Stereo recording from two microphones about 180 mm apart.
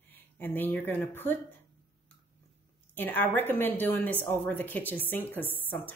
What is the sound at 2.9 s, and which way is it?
A woman's voice, 10° left (ahead or behind).